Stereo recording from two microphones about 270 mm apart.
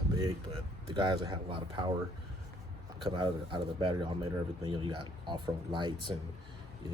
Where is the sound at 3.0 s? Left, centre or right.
Centre.